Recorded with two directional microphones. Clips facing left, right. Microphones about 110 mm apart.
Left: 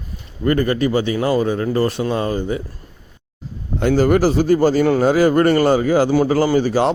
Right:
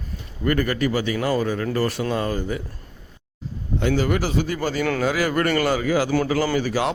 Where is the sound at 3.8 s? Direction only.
45° left (ahead or behind).